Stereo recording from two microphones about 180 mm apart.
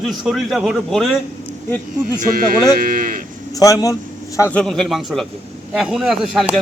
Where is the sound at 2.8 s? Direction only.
50° right (ahead or behind).